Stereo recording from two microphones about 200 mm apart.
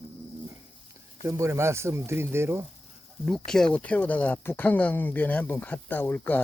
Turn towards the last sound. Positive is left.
turn(degrees=10)  # may be behind; listen again after turning